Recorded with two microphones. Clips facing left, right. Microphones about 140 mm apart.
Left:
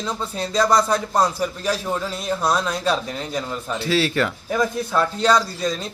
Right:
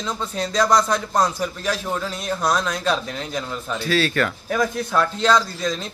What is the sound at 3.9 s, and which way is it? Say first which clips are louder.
Speech: even; 25° left (ahead or behind).